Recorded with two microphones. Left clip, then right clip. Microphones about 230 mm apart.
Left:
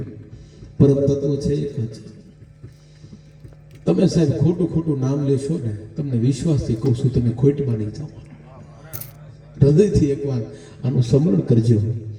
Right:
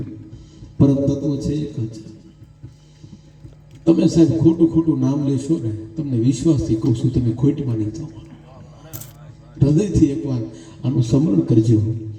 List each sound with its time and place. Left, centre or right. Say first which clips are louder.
0.8 s a man's voice: left 1 dB; left
3.8 s a man's voice: right 4 dB; left
9.6 s a man's voice: left 1 dB; left